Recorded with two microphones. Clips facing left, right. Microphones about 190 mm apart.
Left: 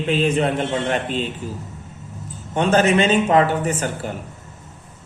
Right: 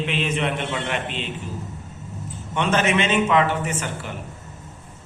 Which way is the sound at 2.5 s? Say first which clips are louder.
Left 5 dB; 35° left (ahead or behind).